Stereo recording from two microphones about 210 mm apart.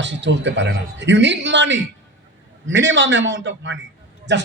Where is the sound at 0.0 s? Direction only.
60° right (ahead or behind).